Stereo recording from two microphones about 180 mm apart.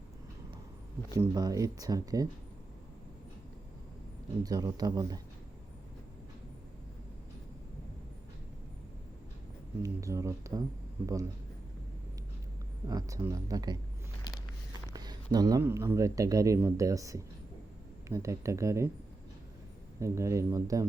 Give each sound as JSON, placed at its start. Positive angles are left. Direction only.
{"t": 1.1, "sound": "speech", "side_deg": -20}
{"t": 4.4, "sound": "speech", "side_deg": -20}
{"t": 9.8, "sound": "speech", "side_deg": -15}
{"t": 12.9, "sound": "speech", "side_deg": -20}
{"t": 14.9, "sound": "speech", "side_deg": -20}
{"t": 20.0, "sound": "speech", "side_deg": -15}